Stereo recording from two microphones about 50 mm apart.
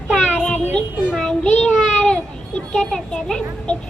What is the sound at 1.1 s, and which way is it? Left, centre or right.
Child singing, centre.